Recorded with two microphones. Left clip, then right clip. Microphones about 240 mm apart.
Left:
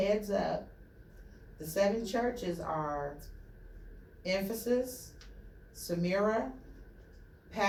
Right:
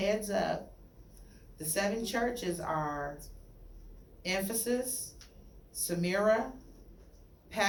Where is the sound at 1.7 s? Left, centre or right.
Right.